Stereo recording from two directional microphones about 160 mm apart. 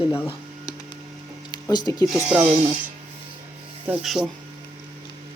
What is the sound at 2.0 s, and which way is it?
Speech, centre (ahead or behind).